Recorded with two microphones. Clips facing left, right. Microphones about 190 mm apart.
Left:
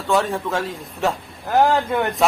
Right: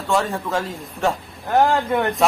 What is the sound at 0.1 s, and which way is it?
Speech, centre (ahead or behind).